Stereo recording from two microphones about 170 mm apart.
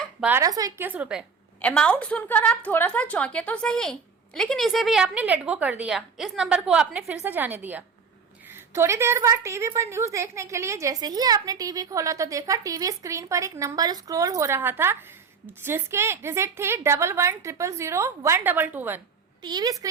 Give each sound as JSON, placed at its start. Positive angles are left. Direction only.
{"t": 0.2, "sound": "a woman's voice", "side_deg": -10}
{"t": 0.4, "sound": "a woman's voice", "side_deg": -20}
{"t": 0.9, "sound": "a woman's voice", "side_deg": -10}
{"t": 1.6, "sound": "a woman's voice", "side_deg": 5}
{"t": 19.4, "sound": "a woman's voice", "side_deg": -25}